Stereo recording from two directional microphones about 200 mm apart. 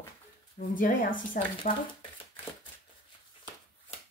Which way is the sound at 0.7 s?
45° left (ahead or behind).